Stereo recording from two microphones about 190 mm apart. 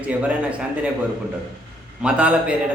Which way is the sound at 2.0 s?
5° right (ahead or behind).